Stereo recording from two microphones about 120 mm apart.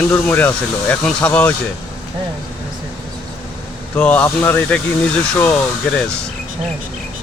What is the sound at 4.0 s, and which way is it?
Speech, 15° left (ahead or behind).